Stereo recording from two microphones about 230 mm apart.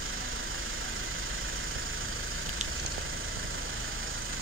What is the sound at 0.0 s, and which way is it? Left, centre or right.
Vehicle, right.